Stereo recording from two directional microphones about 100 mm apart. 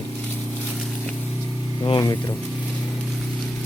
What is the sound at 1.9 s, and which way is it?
Speech, 45° left (ahead or behind).